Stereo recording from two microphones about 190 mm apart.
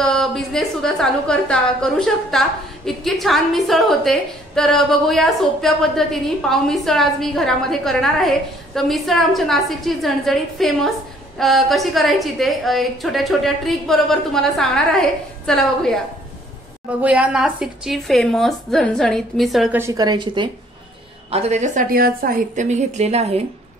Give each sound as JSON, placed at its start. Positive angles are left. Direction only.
{"t": 0.0, "sound": "a woman's voice", "side_deg": 0}
{"t": 17.0, "sound": "a woman's voice", "side_deg": -5}
{"t": 19.8, "sound": "a woman's voice", "side_deg": -20}
{"t": 21.3, "sound": "a woman's voice", "side_deg": -35}